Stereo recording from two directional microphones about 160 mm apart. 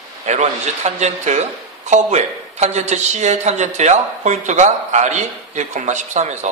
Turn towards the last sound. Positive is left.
turn(degrees=-45)  # may be behind; listen again after turning